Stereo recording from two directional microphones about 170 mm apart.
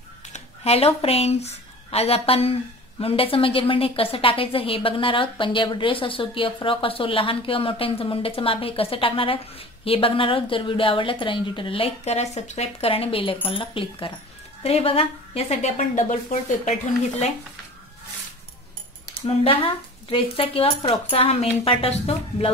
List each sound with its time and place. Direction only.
0.3 s a woman's voice: 35° left (ahead or behind)
19.2 s a woman's voice: 30° left (ahead or behind)